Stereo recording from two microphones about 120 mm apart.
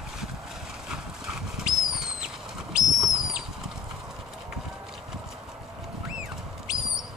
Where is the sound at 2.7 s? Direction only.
5° right (ahead or behind).